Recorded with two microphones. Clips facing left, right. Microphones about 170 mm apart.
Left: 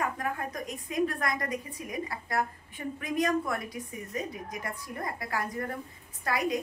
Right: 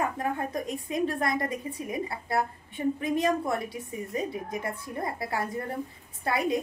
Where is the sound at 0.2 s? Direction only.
25° right (ahead or behind).